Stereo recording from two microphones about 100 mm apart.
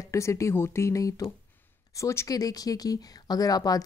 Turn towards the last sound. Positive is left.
turn(degrees=40)  # may be behind; listen again after turning